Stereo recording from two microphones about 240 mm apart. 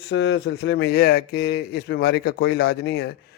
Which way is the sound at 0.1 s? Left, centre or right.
Left.